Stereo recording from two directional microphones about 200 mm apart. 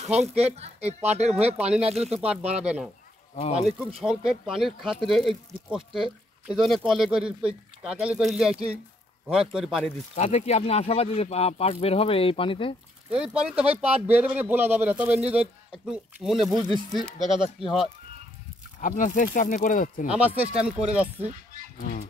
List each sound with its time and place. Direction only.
0.2 s speech: 30° right (ahead or behind)
2.5 s speech: 5° right (ahead or behind)
10.1 s speech: 35° left (ahead or behind)
13.1 s speech: 5° right (ahead or behind)
18.8 s speech: 40° left (ahead or behind)
20.1 s speech: 5° right (ahead or behind)
21.7 s speech: 45° left (ahead or behind)